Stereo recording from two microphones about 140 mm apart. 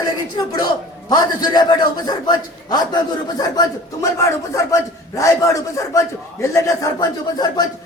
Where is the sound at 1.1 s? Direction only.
30° left (ahead or behind).